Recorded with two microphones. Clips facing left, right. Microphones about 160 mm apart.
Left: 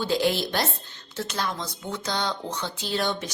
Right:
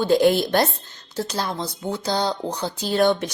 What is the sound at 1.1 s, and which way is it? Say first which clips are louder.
A woman's voice: right 4 dB; 35° right (ahead or behind).